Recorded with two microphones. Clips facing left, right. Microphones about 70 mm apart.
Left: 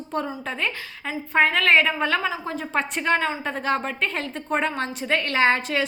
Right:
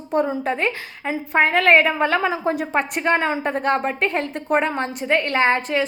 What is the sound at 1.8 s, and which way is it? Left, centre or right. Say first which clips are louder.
A woman's voice: right 3 dB; centre.